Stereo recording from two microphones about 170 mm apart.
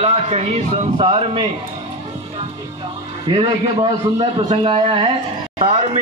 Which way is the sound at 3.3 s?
40° right (ahead or behind).